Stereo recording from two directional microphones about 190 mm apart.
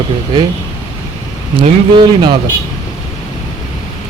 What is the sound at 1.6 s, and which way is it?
Speech, 25° right (ahead or behind).